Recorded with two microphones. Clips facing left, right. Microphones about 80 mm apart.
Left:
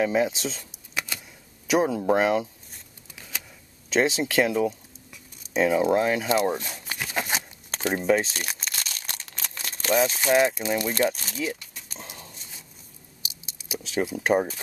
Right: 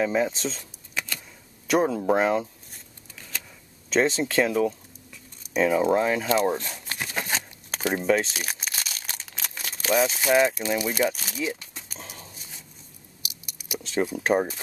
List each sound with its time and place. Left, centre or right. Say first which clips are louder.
0.0 s speech: left 1 dB; centre
0.9 s a sound: even; centre
1.7 s shuffling cards: even; centre
3.9 s speech: even; centre
6.4 s crumpling: right 1 dB; centre
10.6 s speech: even; centre
12.2 s a sound: even; centre
13.2 s a sound: even; left
14.1 s speech: left 2 dB; centre